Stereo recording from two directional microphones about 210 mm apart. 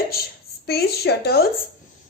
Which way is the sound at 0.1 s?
50° left (ahead or behind).